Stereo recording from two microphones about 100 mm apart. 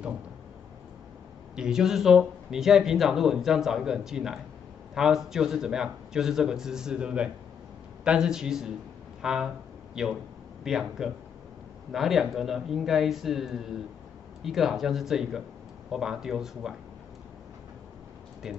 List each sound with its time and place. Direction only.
1.5 s a man's voice: 5° right (ahead or behind)
9.2 s a sound: 5° right (ahead or behind)
10.0 s speech: 5° right (ahead or behind)